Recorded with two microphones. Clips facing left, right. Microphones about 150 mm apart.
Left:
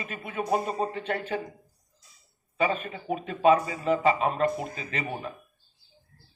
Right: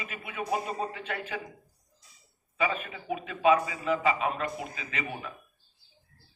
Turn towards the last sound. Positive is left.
turn(degrees=40)  # may be behind; listen again after turning